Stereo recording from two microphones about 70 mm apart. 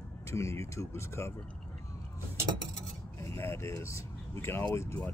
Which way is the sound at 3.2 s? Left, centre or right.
Left.